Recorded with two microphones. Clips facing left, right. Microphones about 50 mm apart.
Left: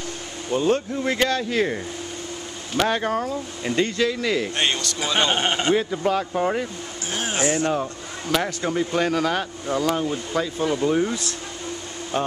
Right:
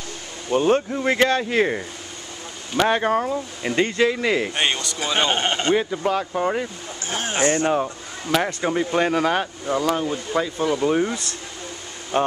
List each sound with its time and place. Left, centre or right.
0.5 s speech: right
4.6 s speech: centre
7.6 s speech: centre